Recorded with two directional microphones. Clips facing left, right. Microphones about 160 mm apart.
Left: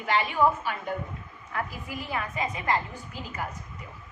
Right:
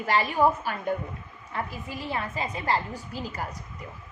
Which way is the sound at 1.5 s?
30° right (ahead or behind).